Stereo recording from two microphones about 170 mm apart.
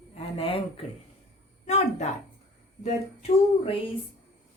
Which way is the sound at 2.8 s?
40° left (ahead or behind).